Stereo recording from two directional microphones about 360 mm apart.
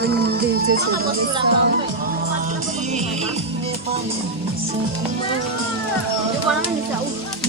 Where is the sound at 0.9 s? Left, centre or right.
Right.